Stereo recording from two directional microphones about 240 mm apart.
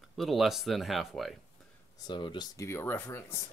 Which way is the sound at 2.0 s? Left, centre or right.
Centre.